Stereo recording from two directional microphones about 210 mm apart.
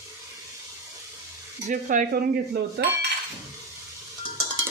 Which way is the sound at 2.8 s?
50° right (ahead or behind).